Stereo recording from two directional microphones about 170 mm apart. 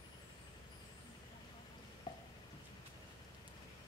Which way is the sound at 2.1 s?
25° left (ahead or behind).